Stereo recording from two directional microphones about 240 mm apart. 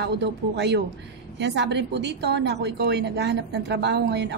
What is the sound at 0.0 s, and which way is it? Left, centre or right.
A woman's voice, right.